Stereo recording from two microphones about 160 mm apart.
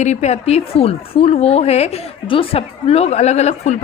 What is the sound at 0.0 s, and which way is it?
A woman's voice, 45° left (ahead or behind).